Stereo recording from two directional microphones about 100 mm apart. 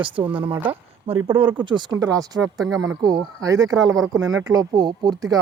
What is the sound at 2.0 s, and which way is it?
Speech, 40° right (ahead or behind).